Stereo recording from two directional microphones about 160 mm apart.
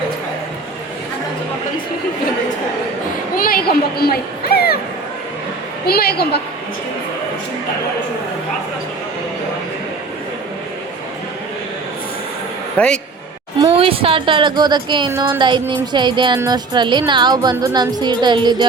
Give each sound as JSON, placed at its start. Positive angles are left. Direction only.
{"t": 3.3, "sound": "a sound", "side_deg": 65}
{"t": 5.8, "sound": "a woman's voice", "side_deg": 80}
{"t": 12.7, "sound": "speech", "side_deg": 10}
{"t": 13.7, "sound": "a woman's voice", "side_deg": -35}